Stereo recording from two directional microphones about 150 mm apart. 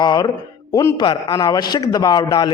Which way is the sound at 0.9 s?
30° left (ahead or behind).